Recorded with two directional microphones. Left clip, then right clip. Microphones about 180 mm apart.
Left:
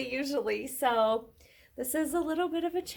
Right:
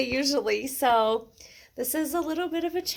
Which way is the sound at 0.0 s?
35° right (ahead or behind).